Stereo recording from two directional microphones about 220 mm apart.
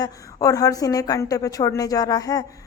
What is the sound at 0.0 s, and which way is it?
Speech, 15° left (ahead or behind).